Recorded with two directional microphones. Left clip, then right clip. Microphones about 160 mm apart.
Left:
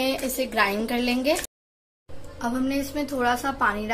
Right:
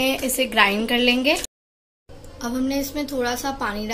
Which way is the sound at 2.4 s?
10° left (ahead or behind).